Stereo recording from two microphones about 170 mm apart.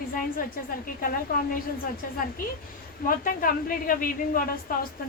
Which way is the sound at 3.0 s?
55° left (ahead or behind).